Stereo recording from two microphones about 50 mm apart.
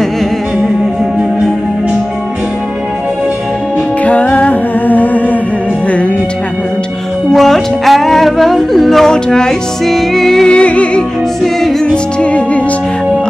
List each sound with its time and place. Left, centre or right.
4.0 s music: left
7.3 s music: centre
10.5 s music: left
11.0 s music: centre
11.8 s music: left